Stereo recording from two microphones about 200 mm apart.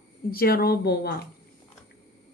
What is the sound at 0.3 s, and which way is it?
Speech, 50° left (ahead or behind).